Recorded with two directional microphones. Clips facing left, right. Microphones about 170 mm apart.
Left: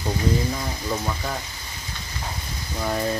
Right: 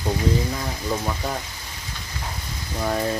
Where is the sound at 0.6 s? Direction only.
5° right (ahead or behind).